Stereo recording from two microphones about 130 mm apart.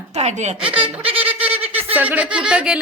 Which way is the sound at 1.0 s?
45° right (ahead or behind).